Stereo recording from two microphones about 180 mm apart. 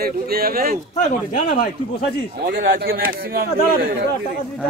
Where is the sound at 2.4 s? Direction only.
60° right (ahead or behind).